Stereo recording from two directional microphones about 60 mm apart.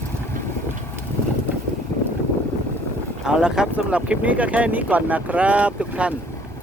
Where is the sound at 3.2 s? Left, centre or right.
Centre.